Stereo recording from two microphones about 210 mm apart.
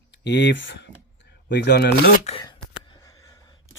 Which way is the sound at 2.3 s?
30° left (ahead or behind).